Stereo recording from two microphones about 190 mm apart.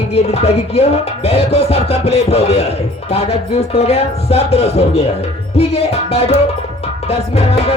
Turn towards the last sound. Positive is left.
turn(degrees=35)  # may be behind; listen again after turning